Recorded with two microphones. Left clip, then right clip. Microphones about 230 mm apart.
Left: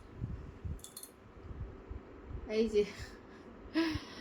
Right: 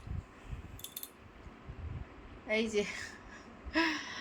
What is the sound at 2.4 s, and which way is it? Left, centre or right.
Speech, right.